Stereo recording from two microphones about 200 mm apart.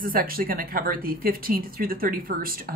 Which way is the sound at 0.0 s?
45° right (ahead or behind).